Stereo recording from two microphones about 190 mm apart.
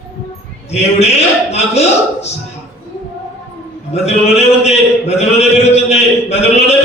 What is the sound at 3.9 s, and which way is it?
A man's voice, 35° left (ahead or behind).